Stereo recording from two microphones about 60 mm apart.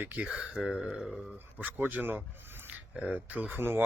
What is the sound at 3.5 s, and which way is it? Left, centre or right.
Speech, right.